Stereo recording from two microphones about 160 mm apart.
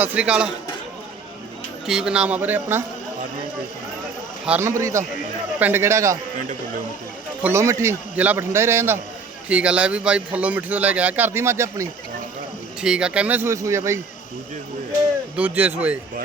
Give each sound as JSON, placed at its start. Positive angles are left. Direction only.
{"t": 0.0, "sound": "speech", "side_deg": -10}
{"t": 1.9, "sound": "speech", "side_deg": -5}
{"t": 4.4, "sound": "speech", "side_deg": -15}
{"t": 7.4, "sound": "speech", "side_deg": -20}
{"t": 12.8, "sound": "speech", "side_deg": -5}
{"t": 15.4, "sound": "speech", "side_deg": -10}